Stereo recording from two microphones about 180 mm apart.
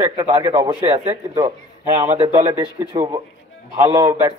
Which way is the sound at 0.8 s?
35° right (ahead or behind).